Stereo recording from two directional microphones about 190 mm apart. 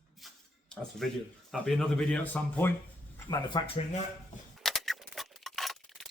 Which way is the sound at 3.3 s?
25° left (ahead or behind).